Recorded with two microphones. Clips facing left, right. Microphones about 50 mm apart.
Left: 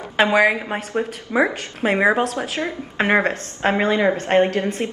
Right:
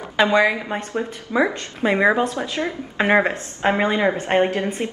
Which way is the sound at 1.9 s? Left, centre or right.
Centre.